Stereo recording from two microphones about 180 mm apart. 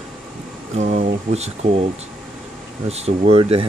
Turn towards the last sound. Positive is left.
turn(degrees=-30)  # may be behind; listen again after turning